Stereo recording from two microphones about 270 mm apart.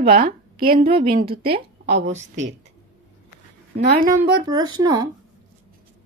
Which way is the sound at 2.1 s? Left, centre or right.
Right.